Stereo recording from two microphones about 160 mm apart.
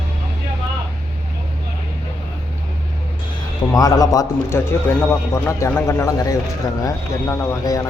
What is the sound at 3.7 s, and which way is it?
A man's voice, 25° left (ahead or behind).